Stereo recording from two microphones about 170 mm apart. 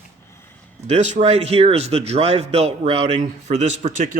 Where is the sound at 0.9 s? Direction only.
45° right (ahead or behind).